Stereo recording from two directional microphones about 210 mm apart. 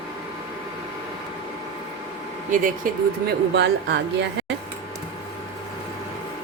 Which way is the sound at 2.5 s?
40° right (ahead or behind).